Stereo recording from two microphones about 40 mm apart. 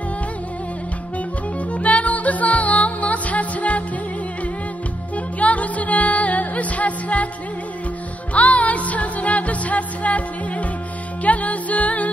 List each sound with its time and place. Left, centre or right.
1.7 s music: left
5.1 s music: left
8.3 s music: left